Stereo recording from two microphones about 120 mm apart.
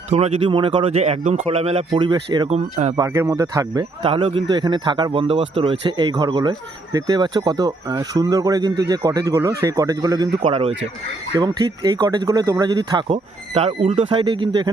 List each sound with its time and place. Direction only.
0.1 s speech: 60° right (ahead or behind)
0.4 s speech: 45° right (ahead or behind)
0.9 s speech: 65° right (ahead or behind)
1.9 s speech: 40° right (ahead or behind)
2.5 s speech: 65° right (ahead or behind)
2.9 s speech: 25° right (ahead or behind)
4.0 s speech: 50° right (ahead or behind)
6.1 s speech: 40° right (ahead or behind)
10.4 s speech: 60° right (ahead or behind)
11.3 s speech: 35° right (ahead or behind)
13.5 s speech: 55° right (ahead or behind)